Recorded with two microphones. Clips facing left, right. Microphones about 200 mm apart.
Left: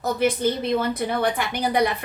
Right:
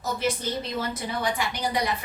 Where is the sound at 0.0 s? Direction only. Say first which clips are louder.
Left 7 dB; 55° left (ahead or behind).